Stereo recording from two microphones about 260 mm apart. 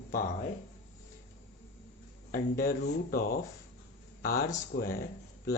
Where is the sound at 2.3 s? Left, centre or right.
Left.